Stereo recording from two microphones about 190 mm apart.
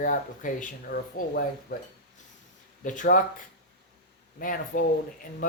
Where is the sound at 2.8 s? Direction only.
40° left (ahead or behind).